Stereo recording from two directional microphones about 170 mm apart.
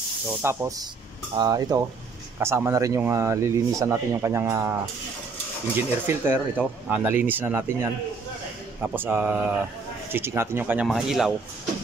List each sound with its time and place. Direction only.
0.3 s speech: 15° right (ahead or behind)
5.8 s speech: 15° right (ahead or behind)